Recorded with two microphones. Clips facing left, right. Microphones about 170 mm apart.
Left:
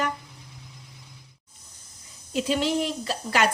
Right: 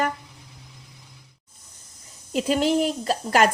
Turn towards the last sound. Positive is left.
turn(degrees=-45)  # may be behind; listen again after turning